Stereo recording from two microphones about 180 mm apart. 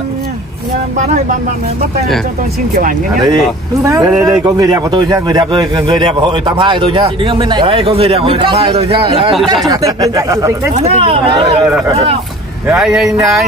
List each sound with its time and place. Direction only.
3.8 s speech: 15° right (ahead or behind)
9.7 s speech: 20° right (ahead or behind)
10.7 s speech: 35° right (ahead or behind)
11.4 s speech: 15° right (ahead or behind)
12.6 s speech: 5° right (ahead or behind)